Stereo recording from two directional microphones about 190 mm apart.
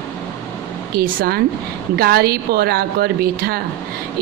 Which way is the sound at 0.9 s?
50° right (ahead or behind).